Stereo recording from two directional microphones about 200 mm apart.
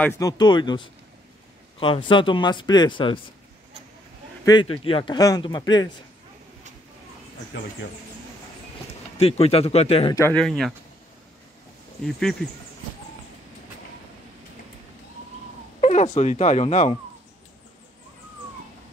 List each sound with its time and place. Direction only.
0.0 s speech: 15° left (ahead or behind)
4.5 s speech: 25° left (ahead or behind)
7.5 s speech: 65° left (ahead or behind)
9.2 s speech: 30° left (ahead or behind)
10.1 s speech: 10° left (ahead or behind)
10.4 s speech: centre (ahead or behind)
12.0 s speech: centre (ahead or behind)
15.8 s speech: 35° left (ahead or behind)